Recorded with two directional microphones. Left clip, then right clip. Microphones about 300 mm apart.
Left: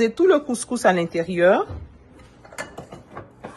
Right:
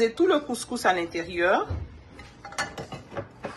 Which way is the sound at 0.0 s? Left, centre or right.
Left.